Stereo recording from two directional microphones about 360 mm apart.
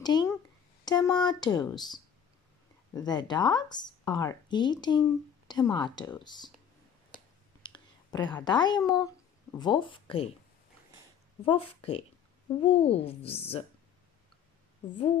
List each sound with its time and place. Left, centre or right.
0.0 s speech: centre
7.6 s speech: centre
11.4 s speech: centre